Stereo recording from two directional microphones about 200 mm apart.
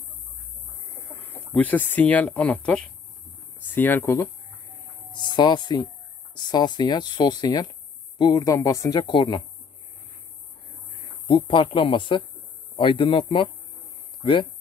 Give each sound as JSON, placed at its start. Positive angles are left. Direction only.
{"t": 1.2, "sound": "speech", "side_deg": 10}
{"t": 11.2, "sound": "speech", "side_deg": 25}